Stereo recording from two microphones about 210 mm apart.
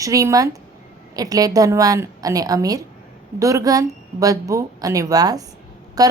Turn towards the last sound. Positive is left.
turn(degrees=-15)  # may be behind; listen again after turning